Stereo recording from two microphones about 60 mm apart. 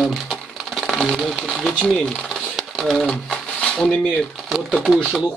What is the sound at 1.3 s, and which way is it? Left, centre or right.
Speech, centre.